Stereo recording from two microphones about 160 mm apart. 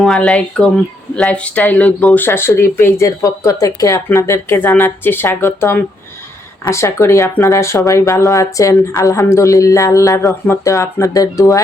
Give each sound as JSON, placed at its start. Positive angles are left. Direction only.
{"t": 0.0, "sound": "speech", "side_deg": 5}